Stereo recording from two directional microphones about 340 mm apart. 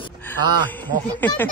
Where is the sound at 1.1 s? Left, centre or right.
Centre.